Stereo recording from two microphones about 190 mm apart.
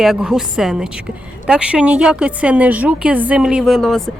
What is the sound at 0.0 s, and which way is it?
A woman's voice, 5° right (ahead or behind).